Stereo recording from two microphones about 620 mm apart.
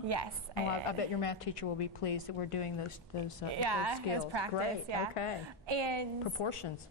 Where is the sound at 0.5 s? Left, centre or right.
Right.